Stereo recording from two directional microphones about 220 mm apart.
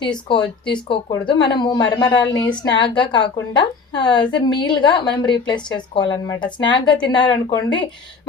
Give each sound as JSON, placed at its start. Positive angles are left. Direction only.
{"t": 0.0, "sound": "a woman's voice", "side_deg": 20}